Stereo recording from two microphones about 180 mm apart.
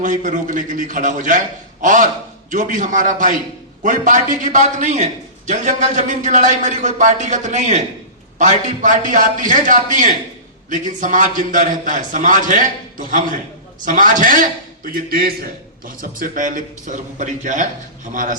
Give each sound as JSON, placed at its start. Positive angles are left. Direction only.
{"t": 0.0, "sound": "a man's voice", "side_deg": -45}